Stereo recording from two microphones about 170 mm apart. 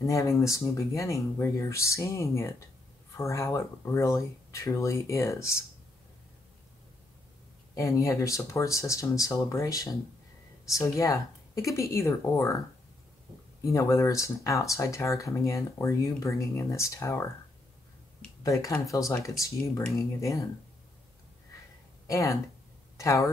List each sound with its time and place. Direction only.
0.0 s speech: 15° left (ahead or behind)
7.7 s speech: 20° left (ahead or behind)
13.7 s speech: 15° left (ahead or behind)
18.4 s speech: 20° left (ahead or behind)
22.0 s speech: 15° left (ahead or behind)